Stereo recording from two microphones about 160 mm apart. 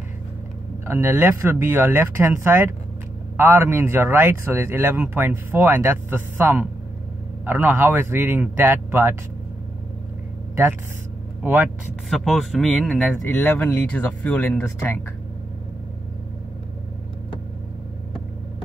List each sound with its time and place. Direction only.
0.8 s speech: 15° right (ahead or behind)
10.5 s speech: 15° right (ahead or behind)
12.1 s speech: centre (ahead or behind)